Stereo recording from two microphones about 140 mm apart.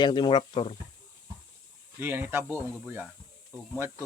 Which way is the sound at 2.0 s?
15° right (ahead or behind).